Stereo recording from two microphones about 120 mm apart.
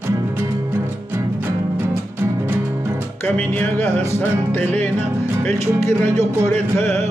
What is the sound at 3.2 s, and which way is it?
Music, 15° left (ahead or behind).